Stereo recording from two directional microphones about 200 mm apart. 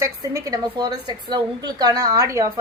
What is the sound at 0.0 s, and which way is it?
A woman's voice, 15° right (ahead or behind).